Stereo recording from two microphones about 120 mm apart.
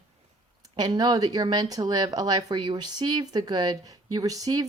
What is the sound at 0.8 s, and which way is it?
Speech, 35° right (ahead or behind).